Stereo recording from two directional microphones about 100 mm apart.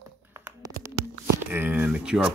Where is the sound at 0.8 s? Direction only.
30° right (ahead or behind).